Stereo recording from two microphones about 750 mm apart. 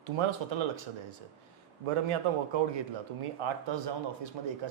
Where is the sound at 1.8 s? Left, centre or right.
Right.